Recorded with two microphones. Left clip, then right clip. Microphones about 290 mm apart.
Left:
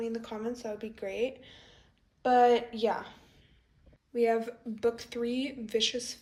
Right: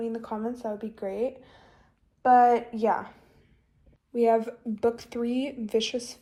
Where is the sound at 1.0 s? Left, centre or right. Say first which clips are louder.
Right 3 dB; right.